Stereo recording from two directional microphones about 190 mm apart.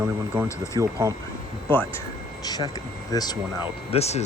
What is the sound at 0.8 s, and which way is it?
Speech, 15° right (ahead or behind).